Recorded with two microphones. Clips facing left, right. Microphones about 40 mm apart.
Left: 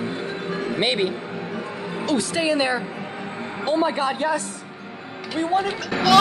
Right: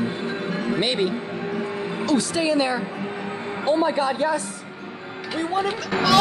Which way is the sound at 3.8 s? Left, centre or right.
Left.